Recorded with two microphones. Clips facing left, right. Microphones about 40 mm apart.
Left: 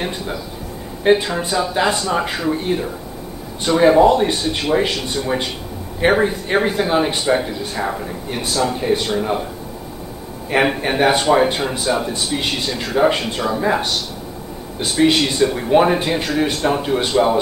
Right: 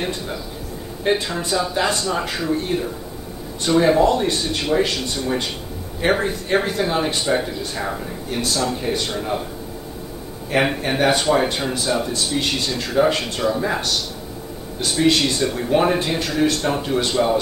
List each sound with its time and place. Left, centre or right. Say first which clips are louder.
1.0 s speech: left 5 dB; centre
10.5 s speech: left 3 dB; centre